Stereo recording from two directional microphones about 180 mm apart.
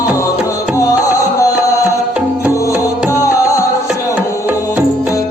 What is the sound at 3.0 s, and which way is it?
Music, 15° left (ahead or behind).